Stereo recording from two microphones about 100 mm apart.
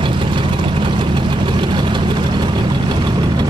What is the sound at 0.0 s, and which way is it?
Vehicle, 55° right (ahead or behind).